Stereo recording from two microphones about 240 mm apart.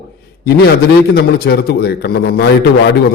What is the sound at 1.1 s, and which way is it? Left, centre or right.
A man's voice, left.